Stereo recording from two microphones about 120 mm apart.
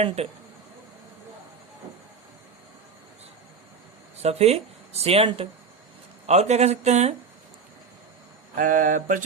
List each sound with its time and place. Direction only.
0.2 s speech: 60° right (ahead or behind)
4.2 s speech: 60° right (ahead or behind)
6.2 s speech: 70° right (ahead or behind)
8.7 s mantra: 90° right